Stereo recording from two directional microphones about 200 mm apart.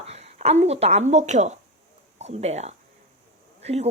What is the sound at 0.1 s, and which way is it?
A woman's voice, 30° right (ahead or behind).